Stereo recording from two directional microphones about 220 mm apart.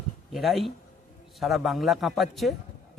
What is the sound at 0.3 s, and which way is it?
Speech, centre (ahead or behind).